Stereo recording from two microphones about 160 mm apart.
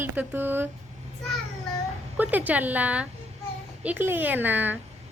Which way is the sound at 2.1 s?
10° right (ahead or behind).